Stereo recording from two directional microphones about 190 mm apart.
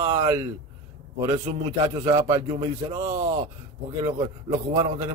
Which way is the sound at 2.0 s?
20° right (ahead or behind).